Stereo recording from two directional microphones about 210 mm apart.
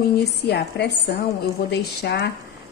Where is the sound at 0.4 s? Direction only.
50° left (ahead or behind).